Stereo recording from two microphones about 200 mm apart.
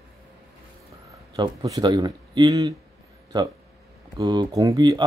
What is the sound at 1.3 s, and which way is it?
Speech, 20° right (ahead or behind).